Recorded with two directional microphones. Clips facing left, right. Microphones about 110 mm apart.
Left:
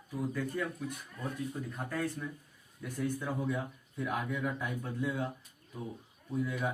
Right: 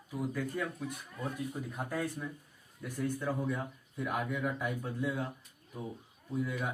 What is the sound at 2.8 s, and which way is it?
Speech, centre (ahead or behind).